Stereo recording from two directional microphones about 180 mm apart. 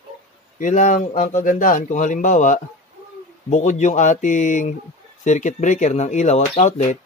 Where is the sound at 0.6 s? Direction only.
45° left (ahead or behind).